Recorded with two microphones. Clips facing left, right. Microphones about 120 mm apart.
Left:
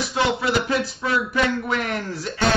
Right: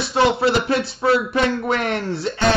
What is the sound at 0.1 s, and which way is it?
A man's voice, 30° right (ahead or behind).